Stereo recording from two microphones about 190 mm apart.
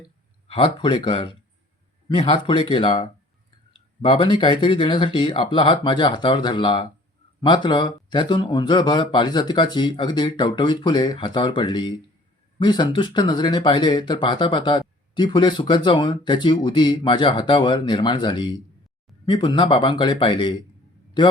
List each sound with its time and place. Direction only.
0.4 s speech: 25° left (ahead or behind)